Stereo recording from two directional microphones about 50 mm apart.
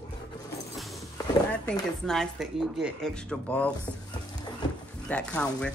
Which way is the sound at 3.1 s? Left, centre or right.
Left.